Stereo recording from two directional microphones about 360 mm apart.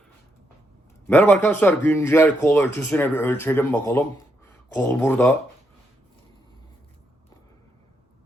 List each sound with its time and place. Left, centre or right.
1.0 s speech: centre